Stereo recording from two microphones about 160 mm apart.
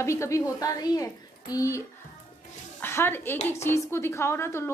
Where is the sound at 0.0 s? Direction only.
20° left (ahead or behind).